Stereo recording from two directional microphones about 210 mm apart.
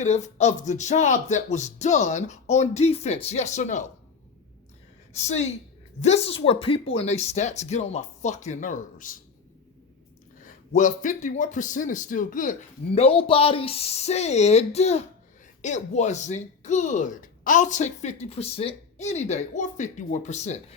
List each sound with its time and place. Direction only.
0.0 s speech: 30° left (ahead or behind)
5.1 s speech: 30° left (ahead or behind)
10.4 s speech: 35° left (ahead or behind)